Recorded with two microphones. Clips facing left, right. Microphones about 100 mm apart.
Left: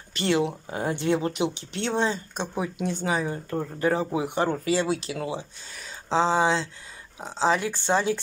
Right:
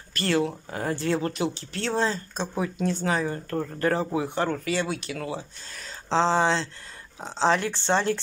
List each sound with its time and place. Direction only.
0.1 s speech: 20° left (ahead or behind)
4.5 s speech: 25° left (ahead or behind)
5.7 s speech: 5° left (ahead or behind)